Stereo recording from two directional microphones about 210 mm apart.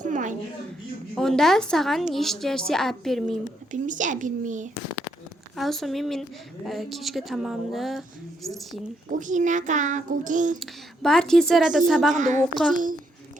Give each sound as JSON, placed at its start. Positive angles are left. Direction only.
{"t": 0.0, "sound": "a sound", "side_deg": -35}
{"t": 1.1, "sound": "speech", "side_deg": 0}
{"t": 3.7, "sound": "a child's voice", "side_deg": -35}
{"t": 5.5, "sound": "speech", "side_deg": 0}
{"t": 9.1, "sound": "a child's voice", "side_deg": -35}
{"t": 10.6, "sound": "speech", "side_deg": 0}
{"t": 12.1, "sound": "a child's voice", "side_deg": -35}